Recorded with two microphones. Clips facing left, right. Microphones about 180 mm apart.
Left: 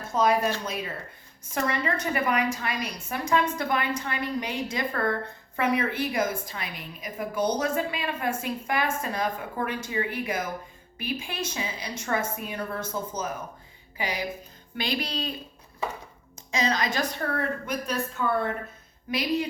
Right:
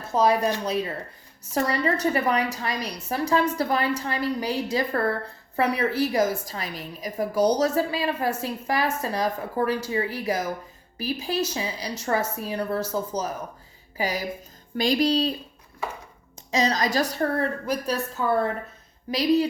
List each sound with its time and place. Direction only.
0.1 s a woman's voice: 35° right (ahead or behind)
16.5 s a woman's voice: 35° right (ahead or behind)